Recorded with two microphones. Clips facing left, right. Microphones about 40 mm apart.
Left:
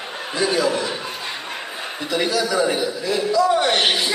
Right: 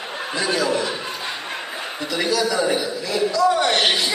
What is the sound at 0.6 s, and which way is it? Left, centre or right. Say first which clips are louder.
Speech: even; centre.